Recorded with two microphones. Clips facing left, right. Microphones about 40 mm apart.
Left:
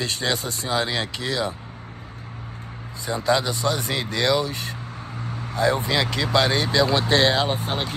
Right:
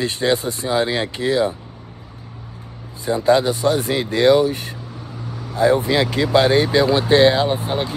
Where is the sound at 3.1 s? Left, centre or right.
Right.